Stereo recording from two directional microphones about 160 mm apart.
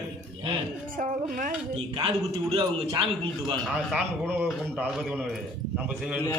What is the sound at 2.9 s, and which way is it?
Speech, 25° right (ahead or behind).